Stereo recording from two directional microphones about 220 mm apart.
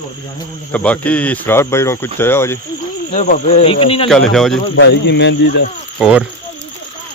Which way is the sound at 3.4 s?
25° left (ahead or behind).